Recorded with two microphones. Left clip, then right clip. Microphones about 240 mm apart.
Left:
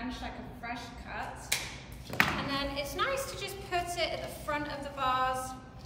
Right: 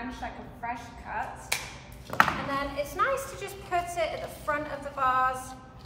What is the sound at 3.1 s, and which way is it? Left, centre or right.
Speech, centre.